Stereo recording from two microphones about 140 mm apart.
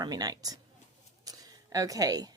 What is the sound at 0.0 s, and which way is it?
A woman's voice, 25° right (ahead or behind).